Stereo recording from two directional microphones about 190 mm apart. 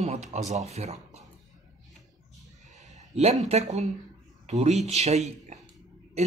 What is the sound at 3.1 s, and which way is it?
Speech, 35° right (ahead or behind).